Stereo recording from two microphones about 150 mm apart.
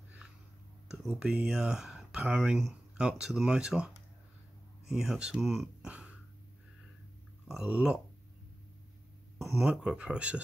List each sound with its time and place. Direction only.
0.9 s speech: 5° right (ahead or behind)
7.4 s speech: 5° right (ahead or behind)
9.4 s speech: 5° right (ahead or behind)